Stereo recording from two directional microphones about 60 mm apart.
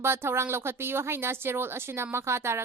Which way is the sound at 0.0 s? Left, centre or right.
Right.